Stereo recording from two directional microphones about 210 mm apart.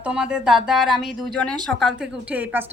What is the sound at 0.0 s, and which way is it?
A woman's voice, 5° right (ahead or behind).